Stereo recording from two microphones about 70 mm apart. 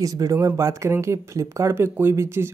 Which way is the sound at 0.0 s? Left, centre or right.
Right.